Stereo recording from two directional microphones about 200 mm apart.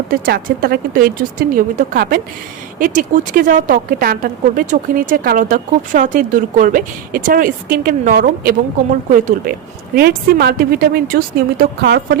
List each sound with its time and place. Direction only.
0.1 s speech: 50° right (ahead or behind)